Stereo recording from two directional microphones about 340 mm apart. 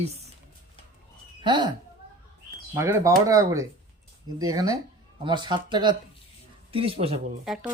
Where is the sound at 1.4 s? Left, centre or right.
Centre.